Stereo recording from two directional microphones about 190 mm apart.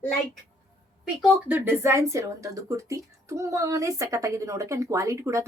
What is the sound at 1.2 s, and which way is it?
Speech, 10° right (ahead or behind).